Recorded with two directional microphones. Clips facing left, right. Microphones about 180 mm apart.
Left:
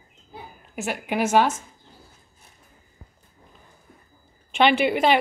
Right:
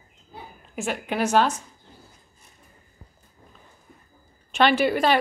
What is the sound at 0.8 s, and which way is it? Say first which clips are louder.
Speech: left 1 dB; 10° left (ahead or behind).